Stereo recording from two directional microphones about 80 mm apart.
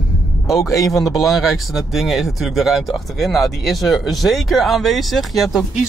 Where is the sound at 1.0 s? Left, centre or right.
Left.